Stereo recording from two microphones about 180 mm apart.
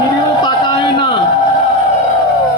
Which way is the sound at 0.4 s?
25° left (ahead or behind).